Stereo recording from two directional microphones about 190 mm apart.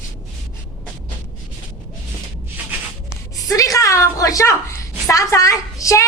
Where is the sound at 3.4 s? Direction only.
15° left (ahead or behind).